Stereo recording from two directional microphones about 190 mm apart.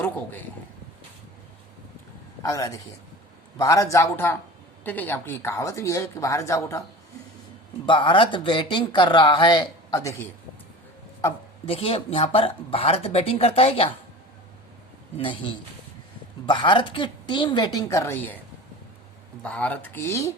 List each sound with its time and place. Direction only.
2.4 s speech: 15° left (ahead or behind)
7.9 s speech: 25° left (ahead or behind)
11.6 s speech: 30° left (ahead or behind)
15.2 s speech: 25° left (ahead or behind)
19.4 s speech: 5° left (ahead or behind)